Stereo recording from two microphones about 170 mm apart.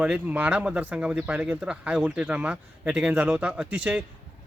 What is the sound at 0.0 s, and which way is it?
Speech, 5° right (ahead or behind).